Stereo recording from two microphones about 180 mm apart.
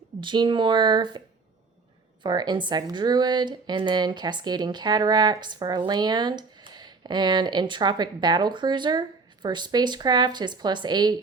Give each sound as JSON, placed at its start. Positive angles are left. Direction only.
{"t": 0.2, "sound": "speech", "side_deg": -25}
{"t": 2.2, "sound": "speech", "side_deg": -25}